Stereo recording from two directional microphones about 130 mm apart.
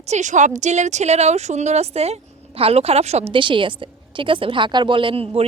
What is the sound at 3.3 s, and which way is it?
Speech, 40° right (ahead or behind).